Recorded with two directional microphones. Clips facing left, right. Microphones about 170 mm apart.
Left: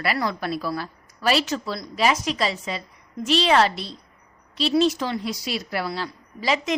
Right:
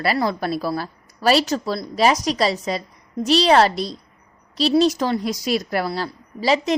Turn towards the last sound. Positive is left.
turn(degrees=-35)  # may be behind; listen again after turning